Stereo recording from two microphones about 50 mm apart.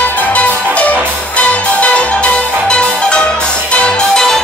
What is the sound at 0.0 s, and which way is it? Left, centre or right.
Music, left.